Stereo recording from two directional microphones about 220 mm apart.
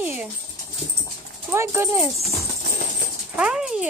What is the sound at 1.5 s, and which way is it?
Speech, 10° right (ahead or behind).